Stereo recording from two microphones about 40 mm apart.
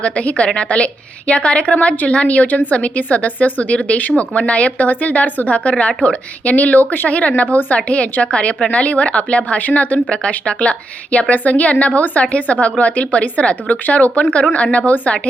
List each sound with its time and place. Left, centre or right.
0.0 s a woman's voice: left
4.9 s a woman's voice: left
5.5 s a woman's voice: left
7.1 s a woman's voice: left
8.2 s a woman's voice: left
9.6 s a woman's voice: left
10.1 s a woman's voice: left
12.2 s a woman's voice: left